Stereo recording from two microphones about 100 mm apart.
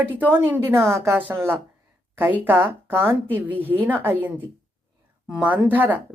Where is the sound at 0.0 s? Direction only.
15° right (ahead or behind).